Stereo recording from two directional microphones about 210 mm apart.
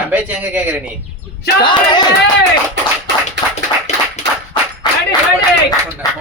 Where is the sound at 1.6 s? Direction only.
20° left (ahead or behind).